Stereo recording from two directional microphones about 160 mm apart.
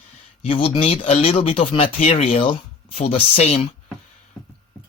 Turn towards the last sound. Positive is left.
turn(degrees=40)  # may be behind; listen again after turning